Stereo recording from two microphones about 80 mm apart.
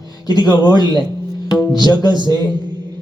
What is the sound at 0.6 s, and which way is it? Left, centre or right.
Speech, left.